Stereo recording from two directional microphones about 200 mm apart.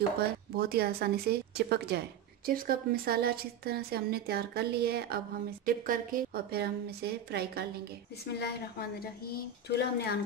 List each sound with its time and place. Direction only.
0.2 s speech: 50° right (ahead or behind)
8.3 s a woman's voice: 55° left (ahead or behind)